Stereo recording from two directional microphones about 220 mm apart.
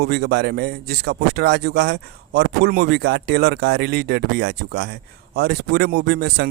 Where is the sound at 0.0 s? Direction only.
50° right (ahead or behind).